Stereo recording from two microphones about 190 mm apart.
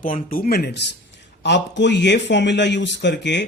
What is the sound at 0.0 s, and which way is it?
A man's voice, 45° left (ahead or behind).